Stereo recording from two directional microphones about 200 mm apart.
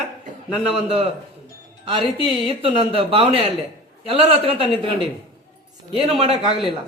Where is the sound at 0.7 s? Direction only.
30° right (ahead or behind).